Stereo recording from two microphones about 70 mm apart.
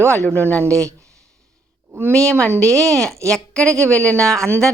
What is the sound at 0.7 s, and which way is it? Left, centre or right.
Speech, right.